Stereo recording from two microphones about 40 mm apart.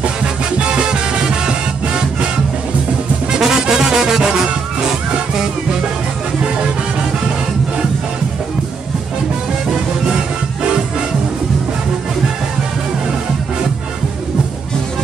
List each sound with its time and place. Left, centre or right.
0.6 s music: right
3.3 s music: centre